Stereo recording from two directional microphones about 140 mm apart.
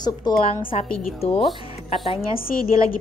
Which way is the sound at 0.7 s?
45° left (ahead or behind).